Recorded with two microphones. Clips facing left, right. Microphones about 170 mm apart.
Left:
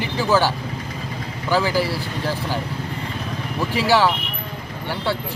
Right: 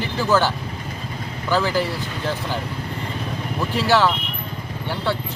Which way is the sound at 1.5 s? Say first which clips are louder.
Left 1 dB; 10° left (ahead or behind).